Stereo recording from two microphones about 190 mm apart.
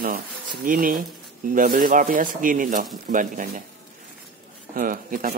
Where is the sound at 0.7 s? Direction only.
50° right (ahead or behind).